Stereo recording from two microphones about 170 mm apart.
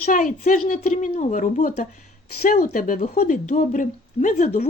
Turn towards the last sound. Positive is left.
turn(degrees=50)  # may be behind; listen again after turning